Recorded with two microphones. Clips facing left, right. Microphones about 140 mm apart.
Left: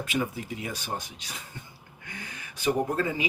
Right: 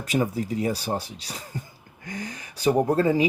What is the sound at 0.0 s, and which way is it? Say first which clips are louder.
Speech: right 5 dB; 40° right (ahead or behind).